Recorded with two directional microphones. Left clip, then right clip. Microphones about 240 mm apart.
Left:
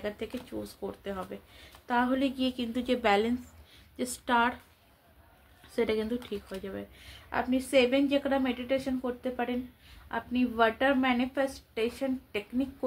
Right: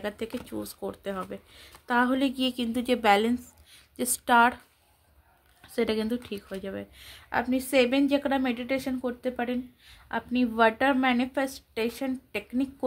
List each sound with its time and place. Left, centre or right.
0.0 s speech: right
5.8 s speech: right